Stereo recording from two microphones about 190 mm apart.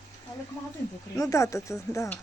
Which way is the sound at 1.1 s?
15° left (ahead or behind).